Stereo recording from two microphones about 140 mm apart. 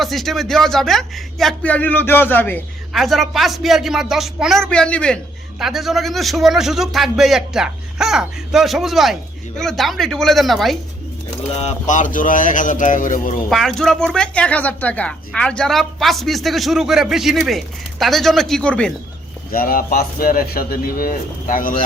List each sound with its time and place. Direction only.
0.0 s speech: centre (ahead or behind)
2.9 s speech: centre (ahead or behind)
11.5 s speech: 55° left (ahead or behind); by 13.3 s 70° left (ahead or behind)
13.5 s speech: 5° left (ahead or behind)
19.5 s speech: 90° left